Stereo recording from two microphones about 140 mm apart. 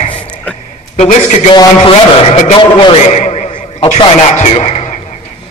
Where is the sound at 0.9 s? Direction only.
55° left (ahead or behind).